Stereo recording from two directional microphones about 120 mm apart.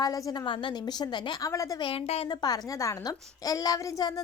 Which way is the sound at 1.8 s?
55° left (ahead or behind).